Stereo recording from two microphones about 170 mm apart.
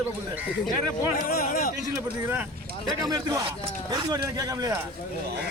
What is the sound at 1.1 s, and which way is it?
Speech, 55° left (ahead or behind).